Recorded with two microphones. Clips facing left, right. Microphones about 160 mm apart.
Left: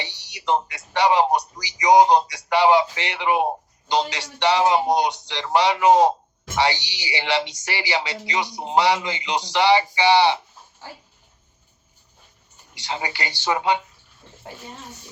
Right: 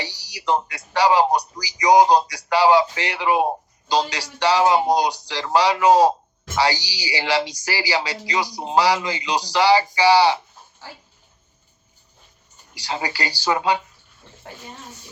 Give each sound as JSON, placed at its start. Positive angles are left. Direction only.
{"t": 0.0, "sound": "a sound", "side_deg": 20}
{"t": 0.9, "sound": "a man's voice", "side_deg": 20}
{"t": 12.7, "sound": "a man's voice", "side_deg": 20}